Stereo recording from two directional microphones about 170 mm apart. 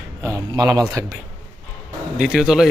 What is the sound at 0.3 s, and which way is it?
Speech, 20° right (ahead or behind).